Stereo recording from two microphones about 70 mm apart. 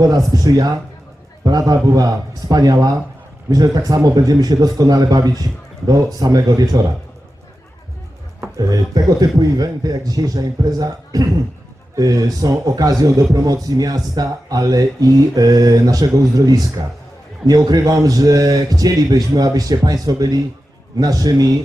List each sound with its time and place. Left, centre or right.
0.4 s a man's voice: right
8.5 s a man's voice: right